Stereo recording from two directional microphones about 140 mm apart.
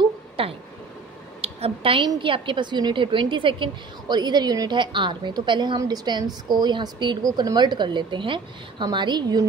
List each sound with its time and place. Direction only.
0.4 s a woman's voice: 40° right (ahead or behind)